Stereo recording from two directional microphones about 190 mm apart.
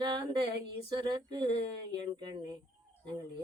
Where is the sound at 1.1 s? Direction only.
25° right (ahead or behind).